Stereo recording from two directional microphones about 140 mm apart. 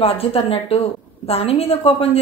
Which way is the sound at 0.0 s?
45° left (ahead or behind).